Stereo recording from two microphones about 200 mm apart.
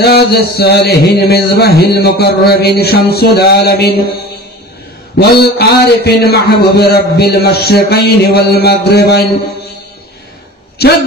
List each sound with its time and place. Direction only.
0.0 s a man's voice: 55° left (ahead or behind)
5.1 s a man's voice: 55° left (ahead or behind)
10.8 s a man's voice: 50° left (ahead or behind)